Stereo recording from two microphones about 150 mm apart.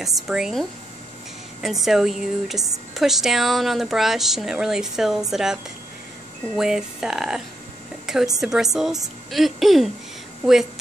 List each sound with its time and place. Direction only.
0.0 s a woman's voice: 5° right (ahead or behind)